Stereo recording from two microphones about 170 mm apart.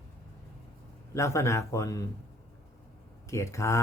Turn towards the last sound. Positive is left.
turn(degrees=15)  # may be behind; listen again after turning